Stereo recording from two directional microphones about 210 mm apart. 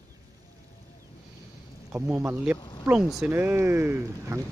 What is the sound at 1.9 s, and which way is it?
Speech, 10° right (ahead or behind).